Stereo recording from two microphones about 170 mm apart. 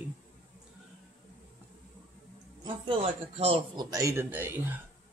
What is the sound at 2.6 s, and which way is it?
Speech, 35° right (ahead or behind).